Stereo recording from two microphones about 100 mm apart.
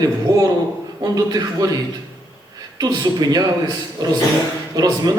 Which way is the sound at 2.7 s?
40° right (ahead or behind).